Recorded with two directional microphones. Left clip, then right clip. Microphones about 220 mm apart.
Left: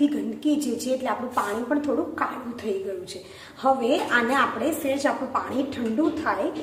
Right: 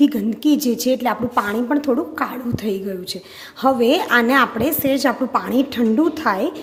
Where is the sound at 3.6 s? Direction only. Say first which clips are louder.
Right 6 dB; 50° right (ahead or behind).